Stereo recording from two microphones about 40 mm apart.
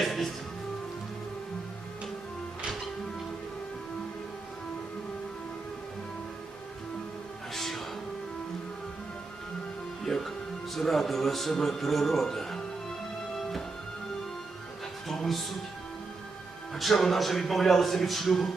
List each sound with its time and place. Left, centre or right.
0.0 s music: centre
7.5 s music: centre
10.0 s music: centre
10.8 s a man's voice: centre
15.0 s music: centre
16.7 s a man's voice: centre